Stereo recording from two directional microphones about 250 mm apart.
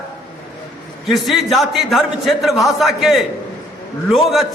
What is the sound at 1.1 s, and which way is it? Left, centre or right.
A man's voice, centre.